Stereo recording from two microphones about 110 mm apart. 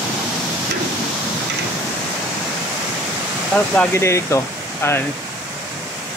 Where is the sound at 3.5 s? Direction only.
10° left (ahead or behind).